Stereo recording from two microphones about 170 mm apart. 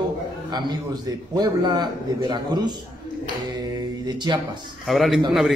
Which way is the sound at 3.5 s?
25° right (ahead or behind).